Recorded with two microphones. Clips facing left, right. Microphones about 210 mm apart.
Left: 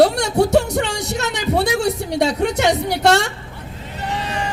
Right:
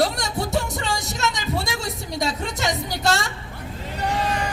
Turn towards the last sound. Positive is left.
turn(degrees=-40)  # may be behind; listen again after turning